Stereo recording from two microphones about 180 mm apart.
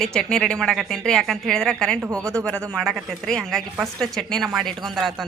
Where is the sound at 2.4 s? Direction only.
5° left (ahead or behind).